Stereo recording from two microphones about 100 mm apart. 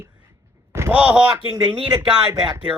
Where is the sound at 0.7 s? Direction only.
25° right (ahead or behind).